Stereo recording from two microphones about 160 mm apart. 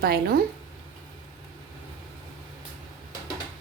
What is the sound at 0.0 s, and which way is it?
Speech, 80° right.